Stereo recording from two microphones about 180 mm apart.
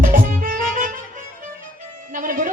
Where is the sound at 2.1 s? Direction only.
50° right (ahead or behind).